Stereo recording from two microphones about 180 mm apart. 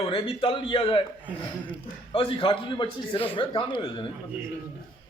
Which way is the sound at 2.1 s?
30° left (ahead or behind).